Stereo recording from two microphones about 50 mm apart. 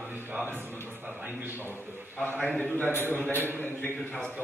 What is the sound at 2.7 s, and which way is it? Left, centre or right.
A man's voice, left.